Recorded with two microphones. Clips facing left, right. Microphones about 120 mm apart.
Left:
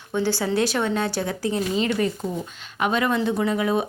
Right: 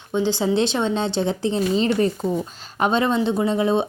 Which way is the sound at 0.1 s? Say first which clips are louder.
Right 3 dB; 20° right (ahead or behind).